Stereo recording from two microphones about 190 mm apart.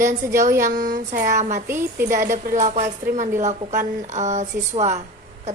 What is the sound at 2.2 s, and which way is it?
Speech, 45° right (ahead or behind).